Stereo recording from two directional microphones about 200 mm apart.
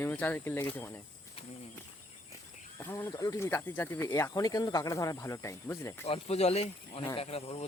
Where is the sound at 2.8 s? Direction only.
10° left (ahead or behind).